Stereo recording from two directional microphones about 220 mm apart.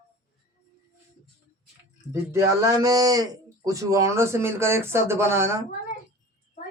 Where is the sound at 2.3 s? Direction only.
15° right (ahead or behind).